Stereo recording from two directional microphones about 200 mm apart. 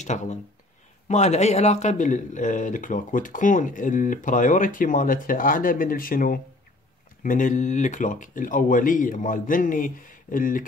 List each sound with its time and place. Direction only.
0.0 s a man's voice: 35° left (ahead or behind)